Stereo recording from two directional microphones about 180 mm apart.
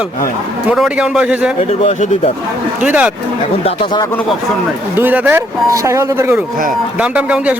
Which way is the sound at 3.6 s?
25° left (ahead or behind).